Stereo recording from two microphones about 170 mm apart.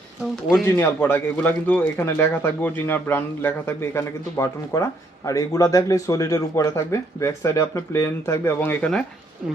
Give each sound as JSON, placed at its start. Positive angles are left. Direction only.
{"t": 0.6, "sound": "a man's voice", "side_deg": 15}